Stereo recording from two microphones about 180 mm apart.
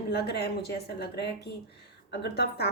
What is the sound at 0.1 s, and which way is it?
A woman's voice, 65° left (ahead or behind).